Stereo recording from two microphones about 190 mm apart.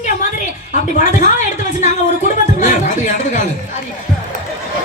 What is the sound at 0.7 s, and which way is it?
Speech, 40° left (ahead or behind).